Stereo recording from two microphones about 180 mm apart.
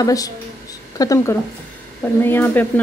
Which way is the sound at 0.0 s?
20° left (ahead or behind).